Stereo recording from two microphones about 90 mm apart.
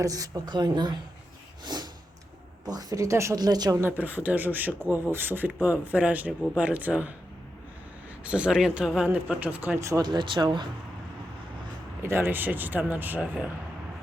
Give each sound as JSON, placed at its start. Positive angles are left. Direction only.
{"t": 0.0, "sound": "speech", "side_deg": -40}
{"t": 1.6, "sound": "snort", "side_deg": -50}
{"t": 2.6, "sound": "speech", "side_deg": -45}
{"t": 3.3, "sound": "speech", "side_deg": -45}
{"t": 3.8, "sound": "speech", "side_deg": -20}
{"t": 8.2, "sound": "speech", "side_deg": -15}
{"t": 9.0, "sound": "speech", "side_deg": -15}
{"t": 10.0, "sound": "speech", "side_deg": -55}
{"t": 12.0, "sound": "speech", "side_deg": -25}